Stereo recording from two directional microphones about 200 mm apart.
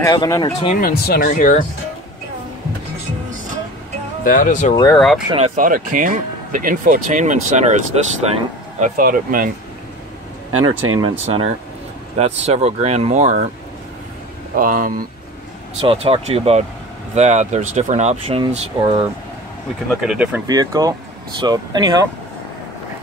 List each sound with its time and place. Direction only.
0.0 s speech: 20° left (ahead or behind)
0.7 s speech: 50° left (ahead or behind)
4.2 s speech: 45° left (ahead or behind)
4.9 s speech: centre (ahead or behind)
5.3 s speech: 35° right (ahead or behind)
11.0 s speech: 30° right (ahead or behind)
14.5 s speech: 45° right (ahead or behind)
15.8 s speech: 25° right (ahead or behind)
19.9 s speech: 5° right (ahead or behind)
20.4 s speech: 15° right (ahead or behind)